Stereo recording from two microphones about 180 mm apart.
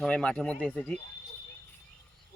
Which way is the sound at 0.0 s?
5° left (ahead or behind).